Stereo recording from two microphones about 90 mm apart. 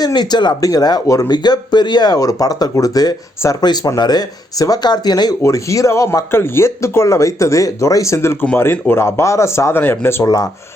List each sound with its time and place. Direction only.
0.0 s speech: 50° left (ahead or behind)
5.4 s speech: 35° left (ahead or behind)